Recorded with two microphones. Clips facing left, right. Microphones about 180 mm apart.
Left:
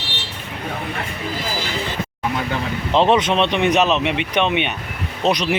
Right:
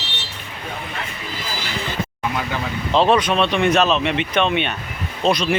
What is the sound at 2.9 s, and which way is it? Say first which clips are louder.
Speech: left 1 dB; 20° left (ahead or behind).